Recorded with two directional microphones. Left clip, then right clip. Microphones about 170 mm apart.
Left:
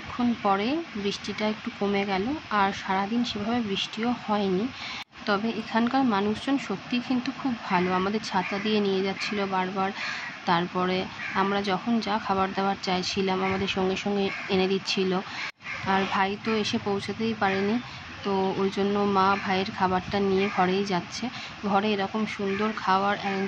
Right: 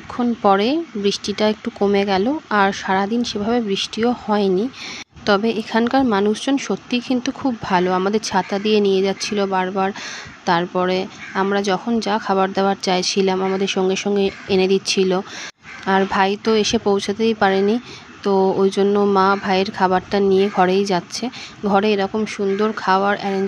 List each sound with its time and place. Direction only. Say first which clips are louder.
0.4 s speech: right 11 dB; 50° right (ahead or behind)